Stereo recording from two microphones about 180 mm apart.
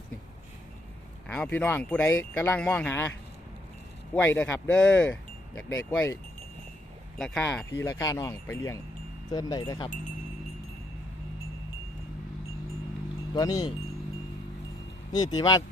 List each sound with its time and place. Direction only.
1.3 s speech: 10° left (ahead or behind)
4.1 s speech: 10° left (ahead or behind)
7.2 s speech: 5° left (ahead or behind)
9.3 s wind chime: 20° left (ahead or behind)
13.3 s wind chime: 20° left (ahead or behind)
15.1 s wind chime: 20° left (ahead or behind)